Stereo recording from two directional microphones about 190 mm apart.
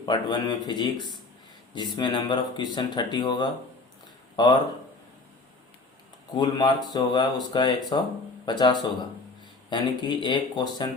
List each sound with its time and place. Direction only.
0.0 s speech: 25° left (ahead or behind)
6.3 s speech: 25° left (ahead or behind)